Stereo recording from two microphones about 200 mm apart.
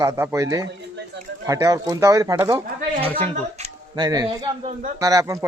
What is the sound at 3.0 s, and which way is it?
Speech, 30° right (ahead or behind).